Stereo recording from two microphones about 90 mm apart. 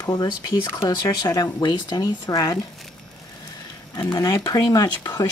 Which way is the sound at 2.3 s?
40° left (ahead or behind).